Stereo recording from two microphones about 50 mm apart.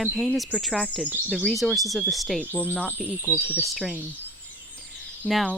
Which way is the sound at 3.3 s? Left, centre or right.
Right.